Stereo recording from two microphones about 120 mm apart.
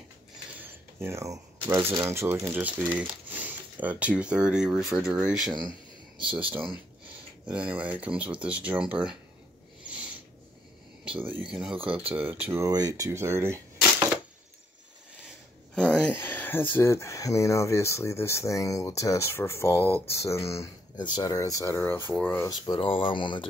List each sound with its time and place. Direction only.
0.9 s speech: 20° right (ahead or behind); by 5.7 s centre (ahead or behind)
7.4 s speech: 10° right (ahead or behind)
11.1 s speech: 15° right (ahead or behind)
11.7 s speech: 50° right (ahead or behind)
12.1 s speech: 15° right (ahead or behind)
12.6 s speech: 30° right (ahead or behind)
15.7 s speech: 10° left (ahead or behind)
22.8 s speech: 45° left (ahead or behind)